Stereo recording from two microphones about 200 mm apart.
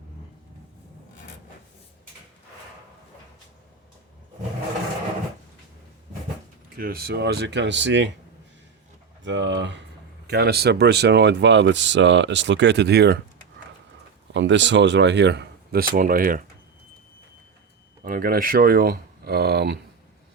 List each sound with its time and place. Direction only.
6.7 s speech: 50° right (ahead or behind)
9.2 s speech: 65° right (ahead or behind)
14.3 s speech: 65° right (ahead or behind); by 16.4 s 45° right (ahead or behind)
18.0 s speech: 45° right (ahead or behind)